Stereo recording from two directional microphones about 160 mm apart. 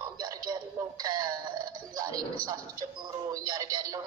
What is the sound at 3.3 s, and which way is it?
Radio, 20° right (ahead or behind).